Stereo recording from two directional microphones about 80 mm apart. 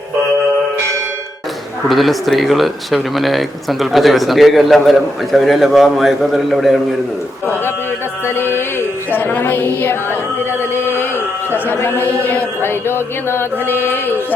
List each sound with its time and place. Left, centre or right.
1.9 s speech: centre
7.4 s speech: centre
10.6 s a sound: left
11.5 s speech: left